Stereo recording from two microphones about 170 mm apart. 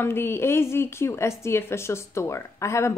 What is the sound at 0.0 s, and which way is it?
Speech, 15° left (ahead or behind).